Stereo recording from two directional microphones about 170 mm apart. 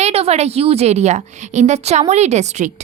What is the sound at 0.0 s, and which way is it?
A woman's voice, 40° right (ahead or behind).